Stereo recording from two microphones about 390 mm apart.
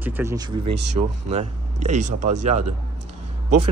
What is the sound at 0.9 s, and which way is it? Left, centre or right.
Speech, centre.